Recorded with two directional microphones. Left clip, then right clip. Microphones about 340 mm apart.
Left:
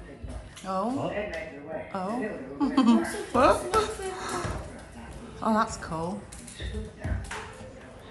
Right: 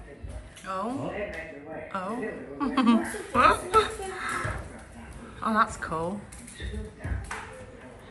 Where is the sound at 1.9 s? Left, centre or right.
Centre.